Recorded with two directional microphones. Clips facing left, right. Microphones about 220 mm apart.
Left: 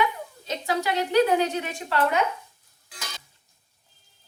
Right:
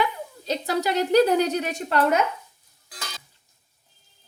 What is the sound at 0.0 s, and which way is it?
A woman's voice, 35° right (ahead or behind).